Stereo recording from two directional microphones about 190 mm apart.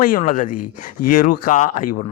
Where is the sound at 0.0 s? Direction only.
45° left (ahead or behind).